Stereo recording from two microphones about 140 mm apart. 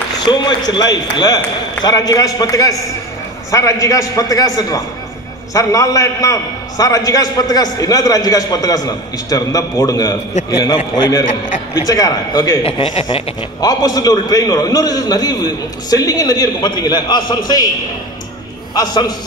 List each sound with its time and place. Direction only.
0.2 s a man's voice: 35° left (ahead or behind)
12.6 s a man's voice: 40° left (ahead or behind)
13.6 s a man's voice: 25° left (ahead or behind)
18.8 s a man's voice: 30° left (ahead or behind)